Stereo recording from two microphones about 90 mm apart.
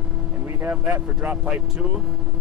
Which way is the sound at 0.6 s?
20° right (ahead or behind).